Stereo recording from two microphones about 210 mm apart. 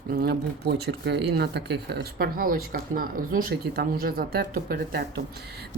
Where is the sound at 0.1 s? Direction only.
45° right (ahead or behind).